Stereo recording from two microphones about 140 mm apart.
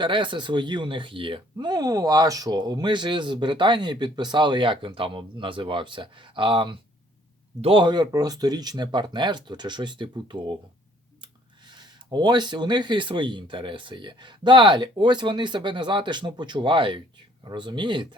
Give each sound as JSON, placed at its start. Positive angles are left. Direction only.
{"t": 0.0, "sound": "speech", "side_deg": -35}